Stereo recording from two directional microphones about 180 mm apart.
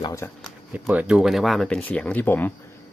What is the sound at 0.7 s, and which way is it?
Speech, 10° right (ahead or behind).